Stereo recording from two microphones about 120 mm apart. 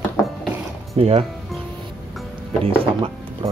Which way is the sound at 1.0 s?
50° right (ahead or behind).